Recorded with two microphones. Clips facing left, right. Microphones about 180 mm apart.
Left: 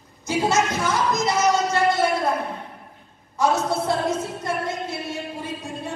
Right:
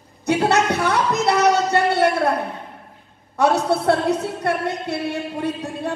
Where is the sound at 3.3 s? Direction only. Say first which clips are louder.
Right 3 dB; 65° right (ahead or behind).